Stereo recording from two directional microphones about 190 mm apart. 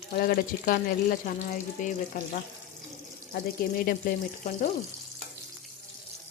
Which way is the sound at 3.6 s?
50° left (ahead or behind).